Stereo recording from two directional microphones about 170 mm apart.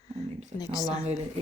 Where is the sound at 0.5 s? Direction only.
20° left (ahead or behind).